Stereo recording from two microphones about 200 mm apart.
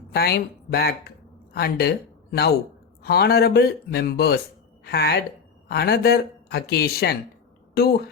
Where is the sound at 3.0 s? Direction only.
50° left (ahead or behind).